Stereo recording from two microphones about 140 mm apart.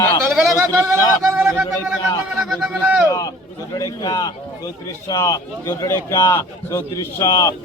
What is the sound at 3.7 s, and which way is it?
A man's voice, 30° left (ahead or behind).